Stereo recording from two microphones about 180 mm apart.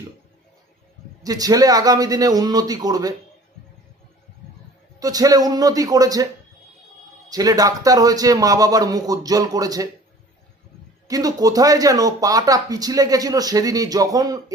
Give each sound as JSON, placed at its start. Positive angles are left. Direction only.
{"t": 1.2, "sound": "speech", "side_deg": -20}
{"t": 4.9, "sound": "speech", "side_deg": -20}
{"t": 7.3, "sound": "speech", "side_deg": -20}
{"t": 11.1, "sound": "speech", "side_deg": -20}